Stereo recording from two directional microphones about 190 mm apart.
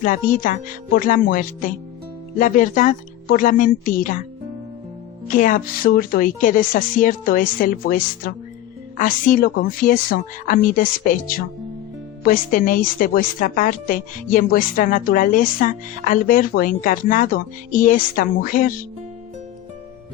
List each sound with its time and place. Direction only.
0.0 s a woman's voice: 45° left (ahead or behind)
5.3 s a woman's voice: 45° left (ahead or behind)